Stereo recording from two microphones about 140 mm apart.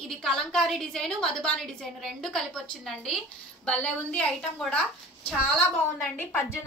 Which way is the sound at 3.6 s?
10° left (ahead or behind).